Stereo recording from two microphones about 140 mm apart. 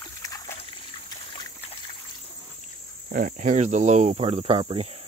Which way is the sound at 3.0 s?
70° right (ahead or behind).